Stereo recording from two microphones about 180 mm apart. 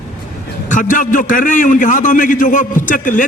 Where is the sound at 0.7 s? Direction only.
45° left (ahead or behind).